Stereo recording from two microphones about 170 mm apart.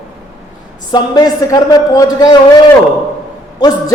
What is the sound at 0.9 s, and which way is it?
A man's voice, 25° left (ahead or behind).